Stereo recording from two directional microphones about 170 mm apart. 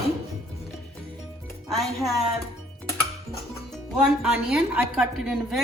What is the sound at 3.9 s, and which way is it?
A woman's voice, 5° right (ahead or behind).